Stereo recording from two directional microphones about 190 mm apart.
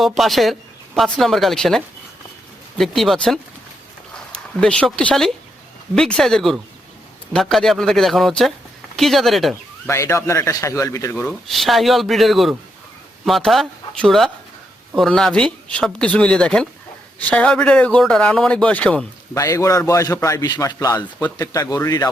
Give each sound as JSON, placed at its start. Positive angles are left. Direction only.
{"t": 0.0, "sound": "a man's voice", "side_deg": 0}
{"t": 9.8, "sound": "a man's voice", "side_deg": 15}
{"t": 11.2, "sound": "a man's voice", "side_deg": 0}
{"t": 19.4, "sound": "a man's voice", "side_deg": 15}